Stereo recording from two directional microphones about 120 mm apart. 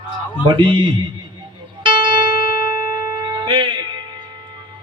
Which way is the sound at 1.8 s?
40° right (ahead or behind).